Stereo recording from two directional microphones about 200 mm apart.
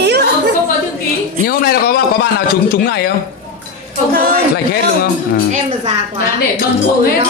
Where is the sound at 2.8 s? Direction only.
55° left (ahead or behind).